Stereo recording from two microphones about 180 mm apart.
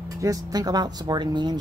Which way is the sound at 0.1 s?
20° right (ahead or behind).